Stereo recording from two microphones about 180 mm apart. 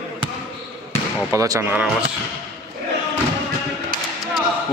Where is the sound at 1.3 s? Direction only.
15° right (ahead or behind).